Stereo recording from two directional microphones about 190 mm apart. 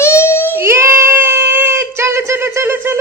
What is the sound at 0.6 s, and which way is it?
Child singing, 15° right (ahead or behind).